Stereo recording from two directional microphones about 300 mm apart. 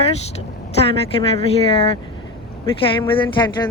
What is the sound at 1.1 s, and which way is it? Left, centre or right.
Speech, centre.